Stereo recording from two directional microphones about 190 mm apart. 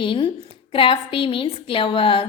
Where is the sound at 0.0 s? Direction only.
25° left (ahead or behind).